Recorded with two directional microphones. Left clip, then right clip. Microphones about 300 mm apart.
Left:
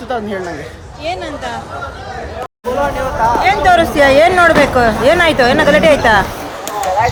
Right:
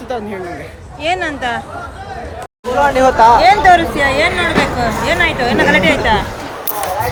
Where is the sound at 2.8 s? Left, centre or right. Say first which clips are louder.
Right 7 dB; centre.